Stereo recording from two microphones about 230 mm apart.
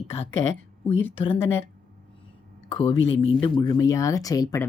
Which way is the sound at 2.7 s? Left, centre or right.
Left.